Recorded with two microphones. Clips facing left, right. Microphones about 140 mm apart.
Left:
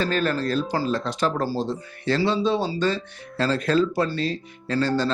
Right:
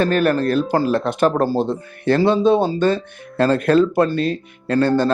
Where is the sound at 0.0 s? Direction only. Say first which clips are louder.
Right 7 dB; 60° right (ahead or behind).